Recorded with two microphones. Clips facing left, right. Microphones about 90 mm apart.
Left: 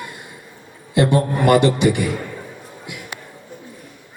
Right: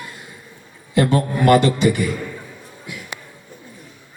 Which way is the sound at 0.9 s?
20° left (ahead or behind).